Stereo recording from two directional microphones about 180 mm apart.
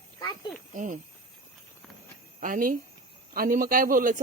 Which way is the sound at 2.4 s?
50° right (ahead or behind).